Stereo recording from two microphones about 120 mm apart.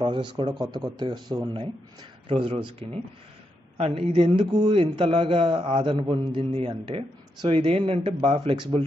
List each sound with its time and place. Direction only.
0.0 s a man's voice: 45° right (ahead or behind)